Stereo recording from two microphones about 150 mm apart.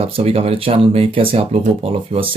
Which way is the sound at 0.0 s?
40° right (ahead or behind).